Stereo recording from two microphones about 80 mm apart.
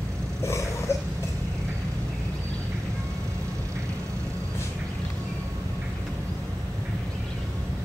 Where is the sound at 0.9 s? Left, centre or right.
Left.